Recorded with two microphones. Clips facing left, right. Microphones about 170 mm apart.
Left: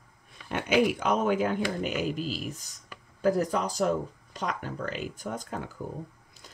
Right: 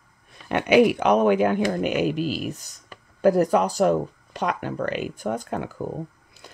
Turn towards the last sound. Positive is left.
turn(degrees=-70)  # may be behind; listen again after turning